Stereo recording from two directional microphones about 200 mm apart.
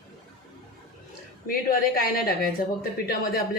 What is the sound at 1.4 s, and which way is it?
Speech, 45° left (ahead or behind).